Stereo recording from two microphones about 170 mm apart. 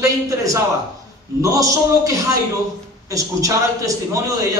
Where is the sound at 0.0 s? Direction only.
20° right (ahead or behind).